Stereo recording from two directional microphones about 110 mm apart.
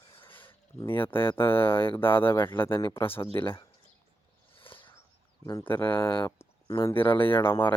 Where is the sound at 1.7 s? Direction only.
55° left (ahead or behind).